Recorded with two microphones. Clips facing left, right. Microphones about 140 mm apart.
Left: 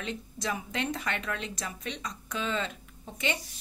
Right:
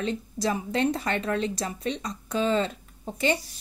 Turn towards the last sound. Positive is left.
turn(degrees=-35)  # may be behind; listen again after turning